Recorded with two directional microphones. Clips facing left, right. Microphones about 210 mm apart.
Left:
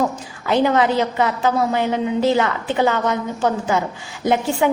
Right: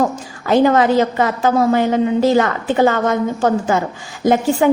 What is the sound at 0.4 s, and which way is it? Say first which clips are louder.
A woman's voice: right 4 dB; 45° right (ahead or behind).